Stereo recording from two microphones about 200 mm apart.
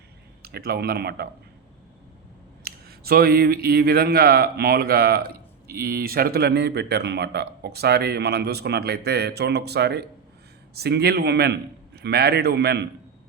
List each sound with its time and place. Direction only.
0.4 s speech: 50° right (ahead or behind)
2.6 s speech: 50° right (ahead or behind)